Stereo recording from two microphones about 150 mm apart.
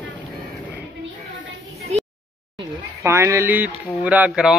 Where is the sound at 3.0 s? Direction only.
15° right (ahead or behind).